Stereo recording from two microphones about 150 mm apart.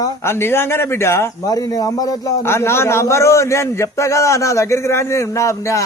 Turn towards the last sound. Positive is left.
turn(degrees=20)  # may be behind; listen again after turning